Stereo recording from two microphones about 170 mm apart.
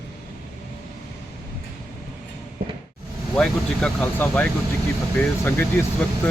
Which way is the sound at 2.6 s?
60° right (ahead or behind).